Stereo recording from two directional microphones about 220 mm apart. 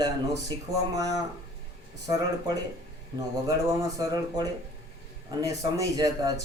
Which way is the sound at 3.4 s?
15° right (ahead or behind).